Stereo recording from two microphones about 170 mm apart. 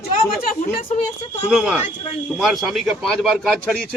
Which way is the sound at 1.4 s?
5° right (ahead or behind).